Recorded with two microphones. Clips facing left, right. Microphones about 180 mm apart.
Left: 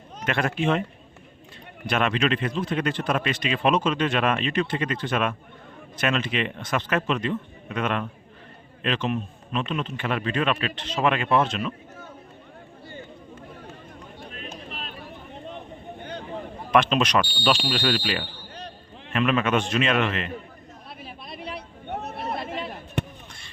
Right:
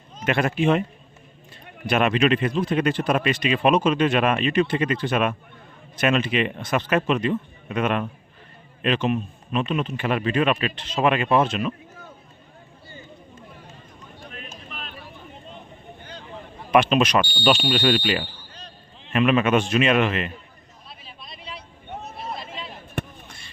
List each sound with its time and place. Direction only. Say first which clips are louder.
0.3 s speech: right 4 dB; 5° right (ahead or behind)
1.9 s speech: right 4 dB; 10° right (ahead or behind)
14.7 s a sound: left 1 dB; 35° left (ahead or behind)
16.0 s vehicle: left 7 dB; 60° left (ahead or behind)
16.7 s speech: right 2 dB; 5° right (ahead or behind)
18.5 s basketball bounce: left 5 dB; 60° left (ahead or behind)
19.1 s speech: right 4 dB; 10° right (ahead or behind)
21.0 s a sound: left 7 dB; 55° left (ahead or behind)